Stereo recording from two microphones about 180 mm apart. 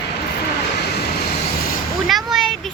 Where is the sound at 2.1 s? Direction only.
Centre (ahead or behind).